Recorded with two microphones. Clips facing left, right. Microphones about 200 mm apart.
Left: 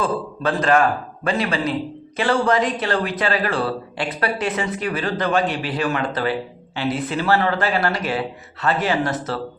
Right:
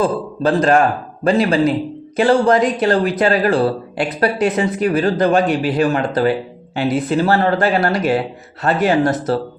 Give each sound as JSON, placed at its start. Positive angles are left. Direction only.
{"t": 0.0, "sound": "speech", "side_deg": -35}